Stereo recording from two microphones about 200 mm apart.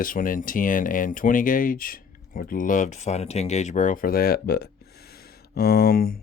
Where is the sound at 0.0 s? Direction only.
45° left (ahead or behind).